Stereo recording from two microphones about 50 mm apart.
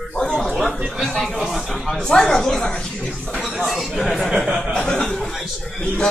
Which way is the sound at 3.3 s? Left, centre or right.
Centre.